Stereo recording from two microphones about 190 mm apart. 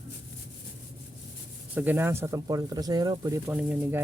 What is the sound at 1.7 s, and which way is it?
Speech, 10° right (ahead or behind).